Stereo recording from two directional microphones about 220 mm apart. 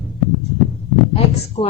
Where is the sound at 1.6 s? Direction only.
30° left (ahead or behind).